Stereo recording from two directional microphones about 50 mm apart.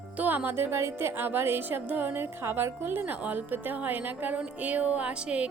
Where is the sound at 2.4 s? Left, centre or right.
Right.